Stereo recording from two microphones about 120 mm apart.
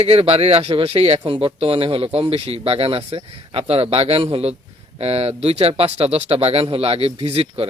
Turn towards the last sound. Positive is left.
turn(degrees=-55)  # may be behind; listen again after turning